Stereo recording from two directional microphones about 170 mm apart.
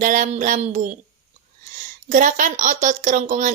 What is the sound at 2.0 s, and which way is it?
A woman's voice, 50° right (ahead or behind).